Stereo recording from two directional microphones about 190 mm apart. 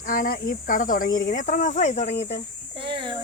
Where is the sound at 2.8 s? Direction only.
25° right (ahead or behind).